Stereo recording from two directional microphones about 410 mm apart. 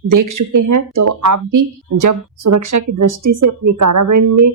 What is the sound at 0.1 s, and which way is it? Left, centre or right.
Speech, right.